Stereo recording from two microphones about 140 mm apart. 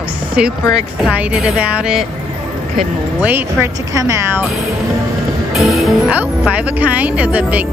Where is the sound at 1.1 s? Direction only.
10° right (ahead or behind).